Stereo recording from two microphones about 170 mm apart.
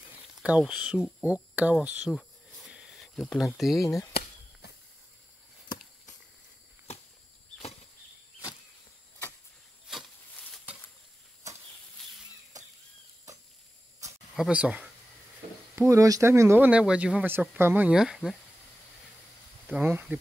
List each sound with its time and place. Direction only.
0.4 s speech: 5° right (ahead or behind)
4.1 s chop: 70° left (ahead or behind)
9.8 s a sound: centre (ahead or behind)
12.0 s a sound: centre (ahead or behind)
14.3 s speech: 5° right (ahead or behind)
15.9 s speech: 20° right (ahead or behind); by 18.3 s centre (ahead or behind)
19.7 s speech: 10° right (ahead or behind)